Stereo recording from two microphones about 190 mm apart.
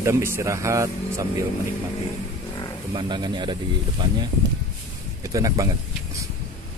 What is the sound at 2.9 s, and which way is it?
Speech, 25° right (ahead or behind).